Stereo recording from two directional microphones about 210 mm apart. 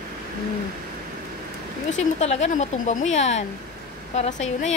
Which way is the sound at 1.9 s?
35° left (ahead or behind).